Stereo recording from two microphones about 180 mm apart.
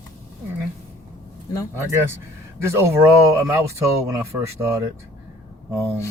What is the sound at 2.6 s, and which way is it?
Speech, 15° right (ahead or behind).